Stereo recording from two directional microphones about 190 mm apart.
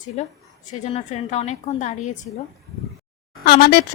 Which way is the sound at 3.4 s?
60° left (ahead or behind).